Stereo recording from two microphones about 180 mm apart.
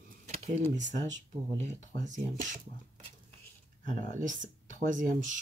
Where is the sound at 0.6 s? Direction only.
45° right (ahead or behind).